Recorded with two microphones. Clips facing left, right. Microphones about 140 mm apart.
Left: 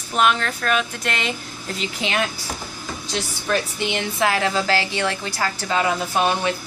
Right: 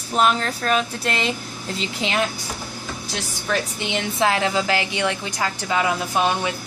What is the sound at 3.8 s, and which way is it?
A woman's voice, 25° right (ahead or behind).